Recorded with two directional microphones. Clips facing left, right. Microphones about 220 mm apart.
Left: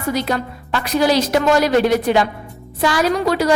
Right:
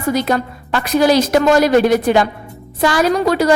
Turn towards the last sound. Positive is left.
turn(degrees=-45)  # may be behind; listen again after turning